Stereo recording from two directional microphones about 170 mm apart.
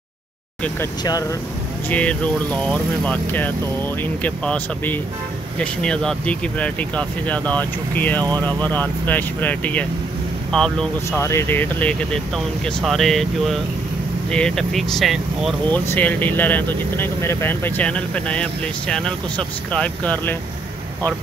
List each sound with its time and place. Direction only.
0.7 s speech: 20° left (ahead or behind)
1.9 s speech: 10° left (ahead or behind)
11.1 s speech: 15° left (ahead or behind); by 15.5 s centre (ahead or behind)
15.7 s speech: 10° left (ahead or behind)